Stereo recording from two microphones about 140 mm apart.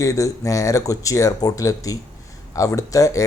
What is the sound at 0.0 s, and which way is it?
Speech, 25° left (ahead or behind).